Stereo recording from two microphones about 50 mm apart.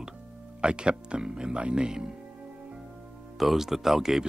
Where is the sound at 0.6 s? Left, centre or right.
Centre.